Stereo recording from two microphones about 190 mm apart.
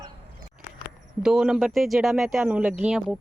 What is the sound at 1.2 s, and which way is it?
Speech, 5° right (ahead or behind).